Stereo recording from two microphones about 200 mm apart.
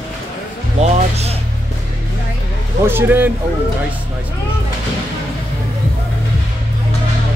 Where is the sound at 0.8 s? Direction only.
30° right (ahead or behind).